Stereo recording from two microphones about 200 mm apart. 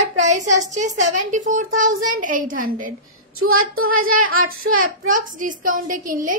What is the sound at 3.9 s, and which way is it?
Speech, 45° right (ahead or behind).